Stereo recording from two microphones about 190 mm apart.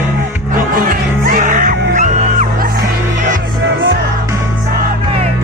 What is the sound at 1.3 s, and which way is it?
Music, 45° right (ahead or behind).